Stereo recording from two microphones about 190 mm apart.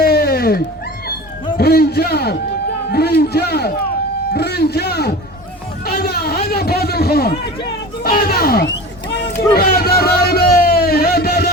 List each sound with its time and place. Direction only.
0.0 s cat: 55° left (ahead or behind)
1.5 s a man's voice: 55° left (ahead or behind)
5.8 s a sound: 55° left (ahead or behind)
9.6 s music: 55° left (ahead or behind)